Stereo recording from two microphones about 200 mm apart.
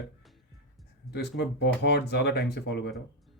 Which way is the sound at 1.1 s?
60° left (ahead or behind).